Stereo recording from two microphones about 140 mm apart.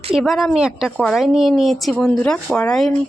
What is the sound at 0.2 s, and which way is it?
A woman's voice, centre (ahead or behind).